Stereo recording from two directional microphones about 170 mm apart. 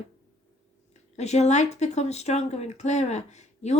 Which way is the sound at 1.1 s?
40° left (ahead or behind).